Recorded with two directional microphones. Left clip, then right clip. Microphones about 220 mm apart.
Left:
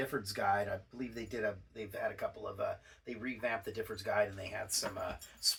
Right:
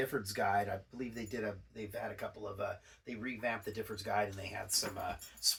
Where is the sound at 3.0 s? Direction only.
10° left (ahead or behind).